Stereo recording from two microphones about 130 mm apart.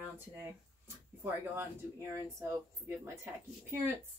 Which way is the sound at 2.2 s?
20° right (ahead or behind).